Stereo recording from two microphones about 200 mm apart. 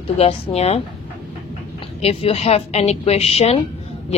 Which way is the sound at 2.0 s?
30° left (ahead or behind).